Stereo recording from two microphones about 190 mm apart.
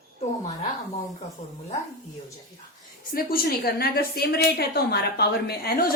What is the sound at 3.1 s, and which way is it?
A woman's voice, 50° left (ahead or behind).